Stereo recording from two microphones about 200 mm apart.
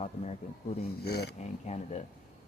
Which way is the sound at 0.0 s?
30° left (ahead or behind).